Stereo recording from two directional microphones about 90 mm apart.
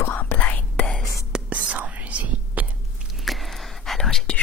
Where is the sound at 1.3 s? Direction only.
15° right (ahead or behind).